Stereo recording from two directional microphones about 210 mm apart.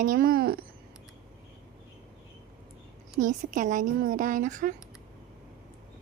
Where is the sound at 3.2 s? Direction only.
40° right (ahead or behind).